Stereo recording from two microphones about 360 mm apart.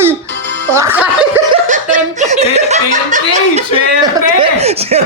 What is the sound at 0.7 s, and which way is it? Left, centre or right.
Speech, centre.